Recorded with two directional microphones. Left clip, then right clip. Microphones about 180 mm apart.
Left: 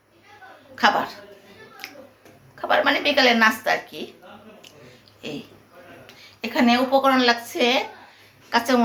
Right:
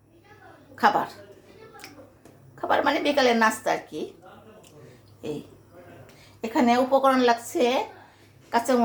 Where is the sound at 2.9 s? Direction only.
45° right (ahead or behind).